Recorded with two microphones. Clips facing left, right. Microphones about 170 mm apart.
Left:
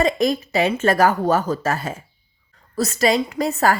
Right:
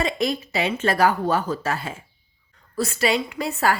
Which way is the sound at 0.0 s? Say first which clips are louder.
Left 5 dB; 45° left (ahead or behind).